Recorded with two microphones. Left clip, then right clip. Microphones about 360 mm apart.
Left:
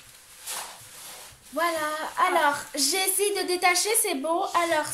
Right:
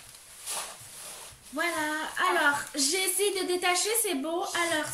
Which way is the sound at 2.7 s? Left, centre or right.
Centre.